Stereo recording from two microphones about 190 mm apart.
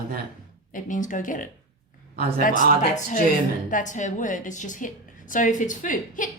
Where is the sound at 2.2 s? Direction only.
50° right (ahead or behind).